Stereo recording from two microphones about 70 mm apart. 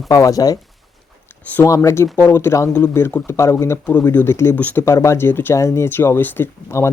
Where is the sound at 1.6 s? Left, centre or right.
Left.